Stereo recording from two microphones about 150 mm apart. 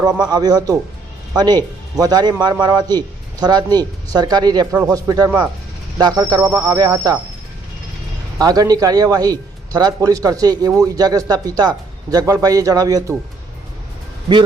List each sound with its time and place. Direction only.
0.2 s speech: 25° right (ahead or behind)
8.4 s speech: 25° right (ahead or behind)